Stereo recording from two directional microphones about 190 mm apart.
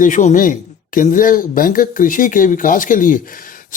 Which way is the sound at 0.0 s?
40° left (ahead or behind).